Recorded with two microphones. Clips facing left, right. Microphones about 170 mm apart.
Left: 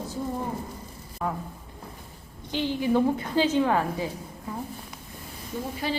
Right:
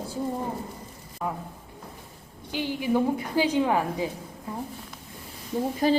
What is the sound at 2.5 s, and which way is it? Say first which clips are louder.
A woman's voice: left 1 dB; 10° right (ahead or behind).